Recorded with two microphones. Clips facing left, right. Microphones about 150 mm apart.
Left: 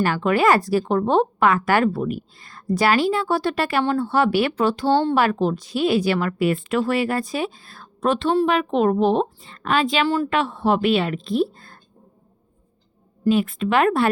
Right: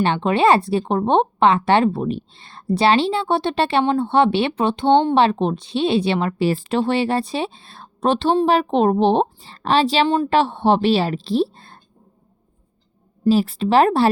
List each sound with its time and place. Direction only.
0.0 s a woman's voice: 25° right (ahead or behind)
13.2 s a woman's voice: 35° right (ahead or behind)